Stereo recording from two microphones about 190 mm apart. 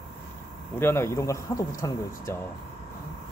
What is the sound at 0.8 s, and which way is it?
A man's voice, 15° left (ahead or behind).